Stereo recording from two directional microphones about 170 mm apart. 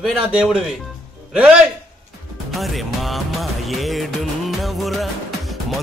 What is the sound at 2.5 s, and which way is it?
Music, centre (ahead or behind).